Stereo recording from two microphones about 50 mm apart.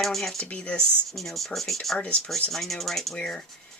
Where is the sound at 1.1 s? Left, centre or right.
Centre.